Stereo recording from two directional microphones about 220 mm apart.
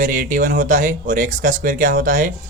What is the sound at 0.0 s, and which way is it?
A man's voice, 35° right (ahead or behind).